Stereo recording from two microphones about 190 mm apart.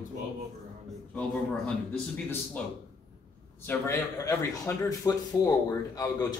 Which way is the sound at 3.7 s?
15° left (ahead or behind).